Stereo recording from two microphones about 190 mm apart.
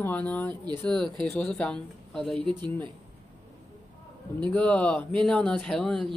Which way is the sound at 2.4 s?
25° right (ahead or behind).